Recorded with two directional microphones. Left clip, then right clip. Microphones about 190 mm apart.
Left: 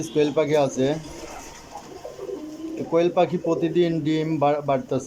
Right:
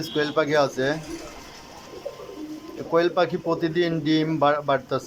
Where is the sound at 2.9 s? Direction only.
15° left (ahead or behind).